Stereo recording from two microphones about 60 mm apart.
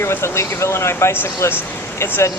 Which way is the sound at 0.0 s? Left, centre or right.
Left.